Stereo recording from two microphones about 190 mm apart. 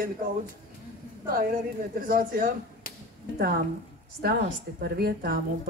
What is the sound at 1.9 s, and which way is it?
Speech, 50° right (ahead or behind).